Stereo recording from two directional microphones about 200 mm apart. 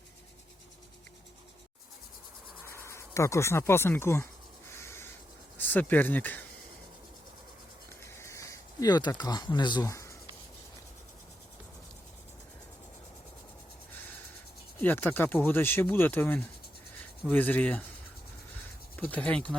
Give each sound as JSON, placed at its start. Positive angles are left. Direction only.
{"t": 2.6, "sound": "speech", "side_deg": 10}
{"t": 4.7, "sound": "crow", "side_deg": 15}
{"t": 5.5, "sound": "speech", "side_deg": 10}
{"t": 8.0, "sound": "a sound", "side_deg": 15}
{"t": 14.8, "sound": "speech", "side_deg": 10}
{"t": 18.9, "sound": "speech", "side_deg": 5}